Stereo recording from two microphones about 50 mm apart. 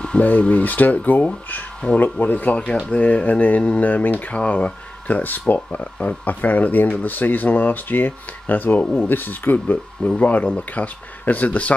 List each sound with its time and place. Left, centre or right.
0.2 s speech: left
4.5 s speech: left